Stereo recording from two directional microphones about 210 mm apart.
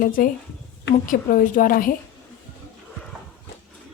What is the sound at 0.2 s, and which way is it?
A woman's voice, 40° left (ahead or behind).